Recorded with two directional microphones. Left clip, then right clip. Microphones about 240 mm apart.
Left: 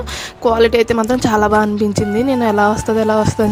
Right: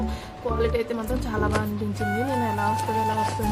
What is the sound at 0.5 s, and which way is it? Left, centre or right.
Speech, left.